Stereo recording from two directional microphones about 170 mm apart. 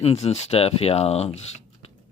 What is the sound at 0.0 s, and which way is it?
Speech, 40° left (ahead or behind).